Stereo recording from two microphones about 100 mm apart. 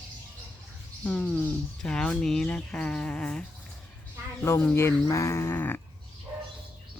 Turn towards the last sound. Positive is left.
turn(degrees=20)  # may be behind; listen again after turning